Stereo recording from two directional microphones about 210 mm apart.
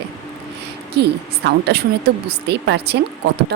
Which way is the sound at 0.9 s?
50° right (ahead or behind).